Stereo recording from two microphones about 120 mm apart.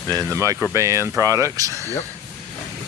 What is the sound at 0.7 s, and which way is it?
Speech, 25° right (ahead or behind).